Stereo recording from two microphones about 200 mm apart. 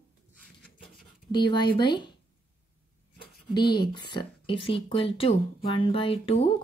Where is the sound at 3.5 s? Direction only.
20° left (ahead or behind).